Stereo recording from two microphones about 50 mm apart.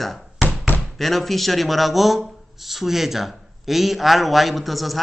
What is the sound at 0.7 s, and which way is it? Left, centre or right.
Knock, left.